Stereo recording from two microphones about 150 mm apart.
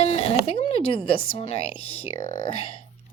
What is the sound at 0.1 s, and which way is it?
Speech, 45° left (ahead or behind).